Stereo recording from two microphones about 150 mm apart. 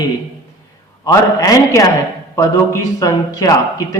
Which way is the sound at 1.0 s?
25° left (ahead or behind).